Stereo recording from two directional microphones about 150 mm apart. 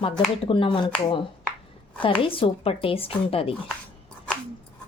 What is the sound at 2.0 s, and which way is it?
Speech, 35° left (ahead or behind).